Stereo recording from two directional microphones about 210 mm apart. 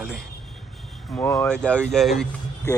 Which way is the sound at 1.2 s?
10° left (ahead or behind).